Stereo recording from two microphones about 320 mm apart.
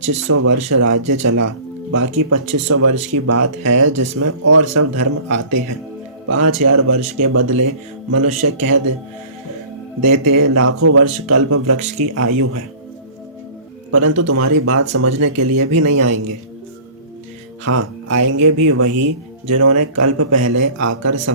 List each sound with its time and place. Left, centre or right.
0.3 s speech: right
2.0 s speech: right
10.1 s speech: right
13.9 s speech: right
17.7 s speech: right